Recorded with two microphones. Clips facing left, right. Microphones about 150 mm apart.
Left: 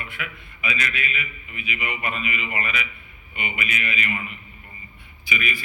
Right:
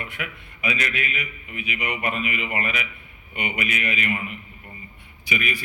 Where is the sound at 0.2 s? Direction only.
50° right (ahead or behind).